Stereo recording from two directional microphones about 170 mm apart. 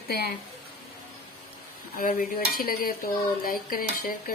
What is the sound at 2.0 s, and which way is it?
Speech, 55° left (ahead or behind).